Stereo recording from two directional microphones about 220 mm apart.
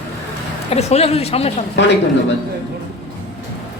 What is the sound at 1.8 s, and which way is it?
Speech, 55° left (ahead or behind).